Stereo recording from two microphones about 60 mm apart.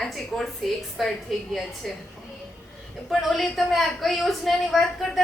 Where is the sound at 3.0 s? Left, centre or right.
Centre.